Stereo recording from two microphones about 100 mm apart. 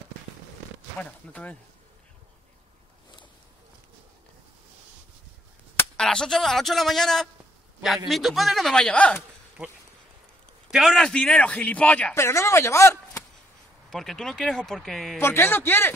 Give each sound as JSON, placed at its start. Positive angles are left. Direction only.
{"t": 0.9, "sound": "a man's voice", "side_deg": 10}
{"t": 5.9, "sound": "a man's voice", "side_deg": 5}
{"t": 10.7, "sound": "a man's voice", "side_deg": 0}
{"t": 12.1, "sound": "speech", "side_deg": 25}
{"t": 13.8, "sound": "a man's voice", "side_deg": 5}
{"t": 15.1, "sound": "speech", "side_deg": 25}